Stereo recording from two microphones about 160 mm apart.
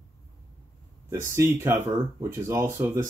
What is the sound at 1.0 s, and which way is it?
Speech, 15° right (ahead or behind).